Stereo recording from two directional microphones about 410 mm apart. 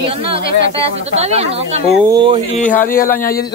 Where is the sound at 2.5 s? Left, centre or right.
Centre.